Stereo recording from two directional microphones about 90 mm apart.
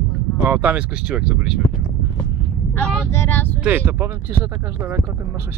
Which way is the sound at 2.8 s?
5° left (ahead or behind).